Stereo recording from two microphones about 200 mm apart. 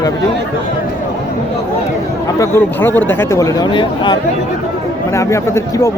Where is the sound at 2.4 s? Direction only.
10° left (ahead or behind).